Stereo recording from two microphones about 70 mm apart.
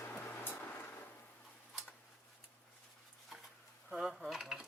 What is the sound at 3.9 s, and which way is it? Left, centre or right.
Dishes, centre.